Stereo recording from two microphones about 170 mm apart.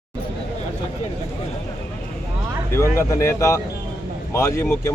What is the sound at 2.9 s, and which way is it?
Speech, 15° left (ahead or behind).